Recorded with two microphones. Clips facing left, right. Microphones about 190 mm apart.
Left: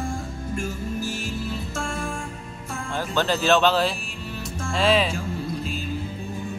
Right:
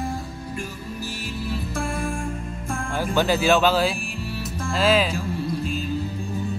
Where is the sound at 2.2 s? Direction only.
50° right (ahead or behind).